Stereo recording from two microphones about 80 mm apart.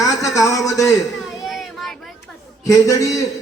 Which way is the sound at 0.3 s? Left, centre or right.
Left.